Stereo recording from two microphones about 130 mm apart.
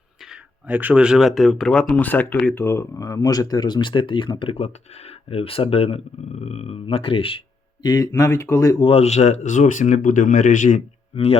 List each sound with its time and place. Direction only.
0.3 s speech: 10° right (ahead or behind); by 7.9 s 40° left (ahead or behind)
7.9 s speech: 30° left (ahead or behind)
8.8 s speech: 50° left (ahead or behind); by 10.8 s 70° left (ahead or behind)
11.1 s speech: 50° left (ahead or behind)